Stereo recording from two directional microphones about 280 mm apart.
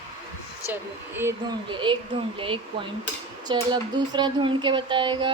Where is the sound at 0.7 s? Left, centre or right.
Centre.